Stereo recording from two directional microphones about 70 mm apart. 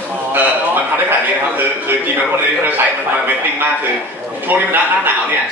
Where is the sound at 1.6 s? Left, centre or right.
Right.